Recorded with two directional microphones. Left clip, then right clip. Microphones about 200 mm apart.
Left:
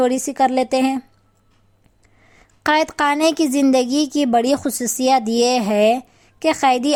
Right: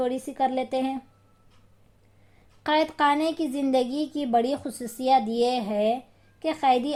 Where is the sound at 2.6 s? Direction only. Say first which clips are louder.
Left 6 dB; 30° left (ahead or behind).